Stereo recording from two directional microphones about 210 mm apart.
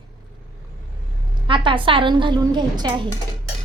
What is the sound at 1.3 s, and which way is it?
A woman's voice, 25° right (ahead or behind).